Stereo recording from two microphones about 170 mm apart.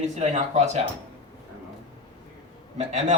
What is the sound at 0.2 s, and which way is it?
Speech, 40° right (ahead or behind).